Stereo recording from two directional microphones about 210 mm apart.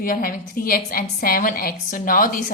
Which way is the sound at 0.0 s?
40° left (ahead or behind).